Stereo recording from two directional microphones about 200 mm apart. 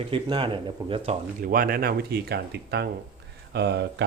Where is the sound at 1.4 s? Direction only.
45° right (ahead or behind).